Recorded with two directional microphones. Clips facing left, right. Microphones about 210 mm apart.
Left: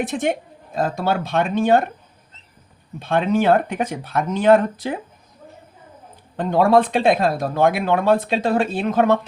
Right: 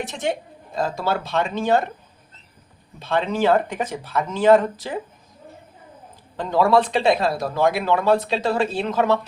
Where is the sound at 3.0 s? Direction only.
50° left (ahead or behind).